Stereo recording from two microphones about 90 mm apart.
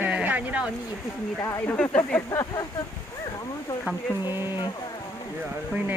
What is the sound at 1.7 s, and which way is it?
Speech, 10° left (ahead or behind).